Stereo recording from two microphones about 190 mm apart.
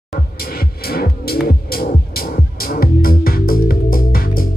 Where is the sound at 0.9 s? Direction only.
55° left (ahead or behind).